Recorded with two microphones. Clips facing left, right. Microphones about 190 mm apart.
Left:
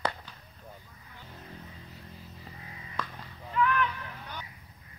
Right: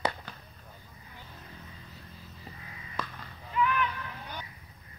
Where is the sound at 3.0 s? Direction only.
10° right (ahead or behind).